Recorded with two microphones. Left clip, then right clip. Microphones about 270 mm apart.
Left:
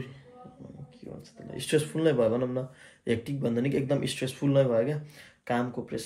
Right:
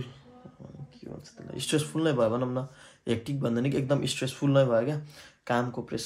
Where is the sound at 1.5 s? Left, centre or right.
Centre.